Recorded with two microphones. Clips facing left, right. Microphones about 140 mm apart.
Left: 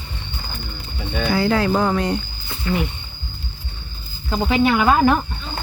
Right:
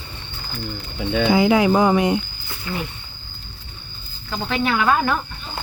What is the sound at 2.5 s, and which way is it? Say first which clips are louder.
Roaring cats: left 6 dB; 20° left (ahead or behind).